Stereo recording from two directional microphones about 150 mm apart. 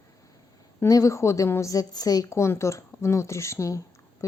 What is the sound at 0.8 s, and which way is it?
Speech, 20° left (ahead or behind).